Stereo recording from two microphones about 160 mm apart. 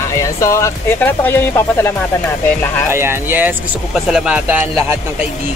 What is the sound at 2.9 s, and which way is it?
Speech, 15° right (ahead or behind).